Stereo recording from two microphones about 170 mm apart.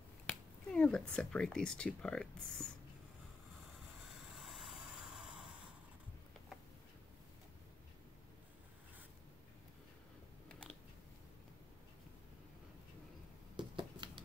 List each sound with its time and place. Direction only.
0.3 s speech: 5° left (ahead or behind)
4.4 s vehicle: centre (ahead or behind)
13.6 s scissors: 25° right (ahead or behind)